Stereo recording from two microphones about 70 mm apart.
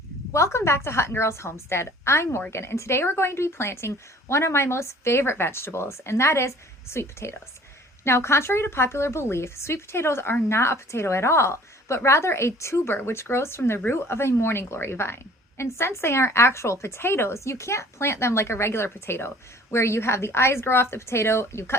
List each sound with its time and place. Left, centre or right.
0.3 s a woman's voice: left